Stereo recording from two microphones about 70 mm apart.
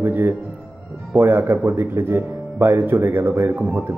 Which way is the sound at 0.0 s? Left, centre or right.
Right.